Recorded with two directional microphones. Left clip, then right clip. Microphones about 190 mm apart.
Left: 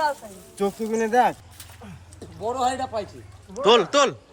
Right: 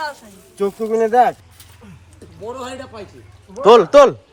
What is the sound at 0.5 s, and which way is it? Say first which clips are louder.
Speech: right 6 dB; 20° right (ahead or behind).